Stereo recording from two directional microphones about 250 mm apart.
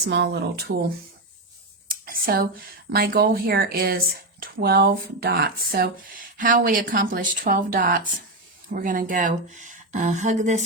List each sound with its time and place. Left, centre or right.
0.1 s speech: right
1.9 s a sound: right
2.9 s speech: right